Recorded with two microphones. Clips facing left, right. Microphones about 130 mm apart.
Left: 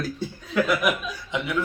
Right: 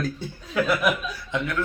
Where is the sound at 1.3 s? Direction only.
15° left (ahead or behind).